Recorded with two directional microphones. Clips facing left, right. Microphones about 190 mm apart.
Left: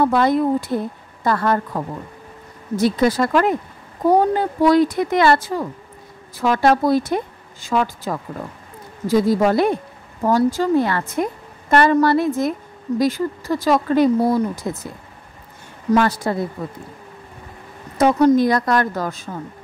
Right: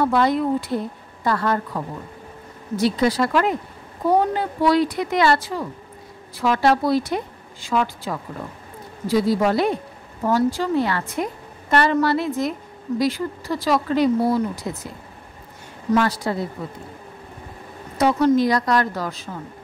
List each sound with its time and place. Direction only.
0.0 s speech: 50° left (ahead or behind)
2.7 s speech: 50° left (ahead or behind)
15.9 s speech: 50° left (ahead or behind)
17.9 s speech: 45° left (ahead or behind)